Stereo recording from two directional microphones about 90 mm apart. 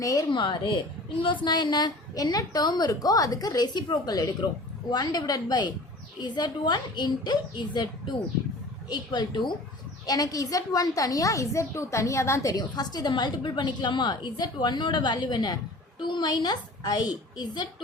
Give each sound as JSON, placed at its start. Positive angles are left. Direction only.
{"t": 0.0, "sound": "a woman's voice", "side_deg": 40}
{"t": 0.3, "sound": "a woman's voice", "side_deg": 60}
{"t": 10.1, "sound": "a woman's voice", "side_deg": 45}